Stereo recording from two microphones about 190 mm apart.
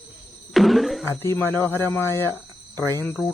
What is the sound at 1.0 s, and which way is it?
Speech, 15° left (ahead or behind).